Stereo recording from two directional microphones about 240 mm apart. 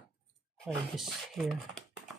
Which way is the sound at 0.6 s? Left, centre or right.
Centre.